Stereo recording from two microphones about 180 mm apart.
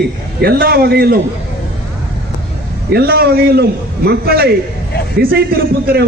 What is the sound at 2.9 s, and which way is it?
A man's voice, 60° right (ahead or behind).